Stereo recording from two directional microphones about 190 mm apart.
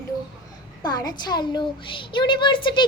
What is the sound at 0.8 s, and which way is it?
A woman's voice, 20° left (ahead or behind).